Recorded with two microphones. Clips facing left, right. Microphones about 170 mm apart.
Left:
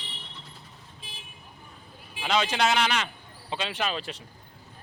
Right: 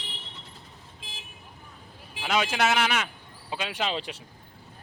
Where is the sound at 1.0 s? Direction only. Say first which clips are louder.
Right 1 dB; 90° right.